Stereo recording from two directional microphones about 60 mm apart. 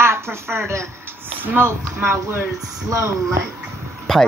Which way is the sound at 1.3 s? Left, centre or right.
Right.